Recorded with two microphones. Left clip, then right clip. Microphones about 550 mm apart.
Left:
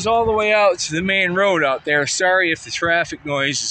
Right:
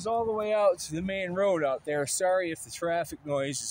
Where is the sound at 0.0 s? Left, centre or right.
Right.